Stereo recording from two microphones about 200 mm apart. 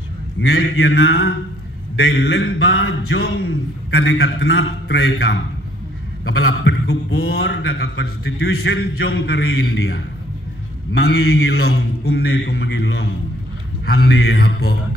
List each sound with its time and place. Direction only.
0.4 s a man's voice: 75° left (ahead or behind)
7.2 s a man's voice: 65° left (ahead or behind)
8.5 s a man's voice: 70° left (ahead or behind)
11.1 s mantra: 90° left
11.6 s a man's voice: 60° left (ahead or behind)
13.8 s a man's voice: 55° left (ahead or behind)